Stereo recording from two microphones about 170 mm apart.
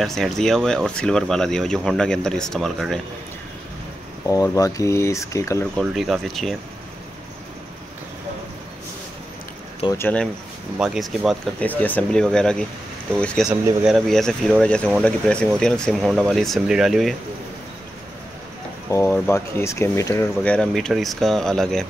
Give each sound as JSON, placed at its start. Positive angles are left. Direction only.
{"t": 0.0, "sound": "speech", "side_deg": 0}
{"t": 4.3, "sound": "speech", "side_deg": 20}
{"t": 5.8, "sound": "speech", "side_deg": 0}
{"t": 9.9, "sound": "speech", "side_deg": 10}
{"t": 10.8, "sound": "speech", "side_deg": 0}
{"t": 18.9, "sound": "speech", "side_deg": 15}